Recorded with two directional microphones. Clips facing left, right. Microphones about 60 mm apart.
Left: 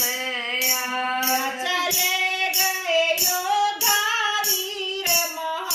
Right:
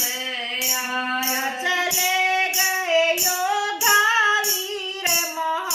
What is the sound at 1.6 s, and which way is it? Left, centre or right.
Female singing, right.